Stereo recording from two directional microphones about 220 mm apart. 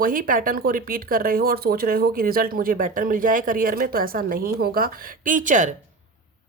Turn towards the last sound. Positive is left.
turn(degrees=-35)  # may be behind; listen again after turning